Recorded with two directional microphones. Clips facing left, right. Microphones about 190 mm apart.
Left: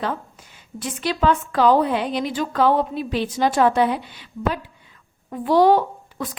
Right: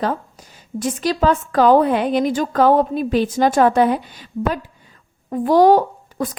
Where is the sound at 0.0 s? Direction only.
40° right (ahead or behind).